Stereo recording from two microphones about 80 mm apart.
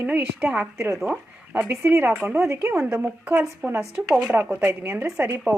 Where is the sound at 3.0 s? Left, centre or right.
Centre.